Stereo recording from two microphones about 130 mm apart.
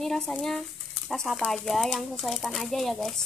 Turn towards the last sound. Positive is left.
turn(degrees=0)  # may be behind; listen again after turning